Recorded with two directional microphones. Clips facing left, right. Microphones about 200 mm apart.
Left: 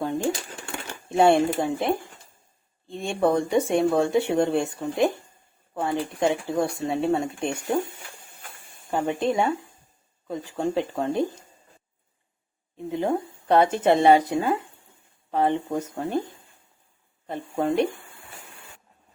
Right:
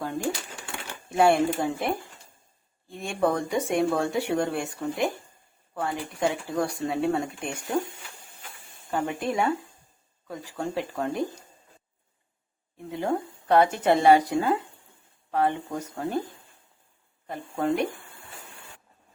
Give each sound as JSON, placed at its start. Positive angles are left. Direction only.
{"t": 0.0, "sound": "typewriter", "side_deg": 25}
{"t": 1.1, "sound": "speech", "side_deg": 25}
{"t": 8.9, "sound": "speech", "side_deg": 20}
{"t": 12.7, "sound": "speech", "side_deg": 20}
{"t": 17.2, "sound": "speech", "side_deg": 25}